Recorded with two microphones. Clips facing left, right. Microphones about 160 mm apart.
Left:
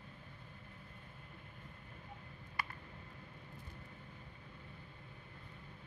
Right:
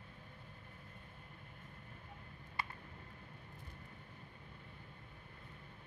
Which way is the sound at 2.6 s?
25° right (ahead or behind).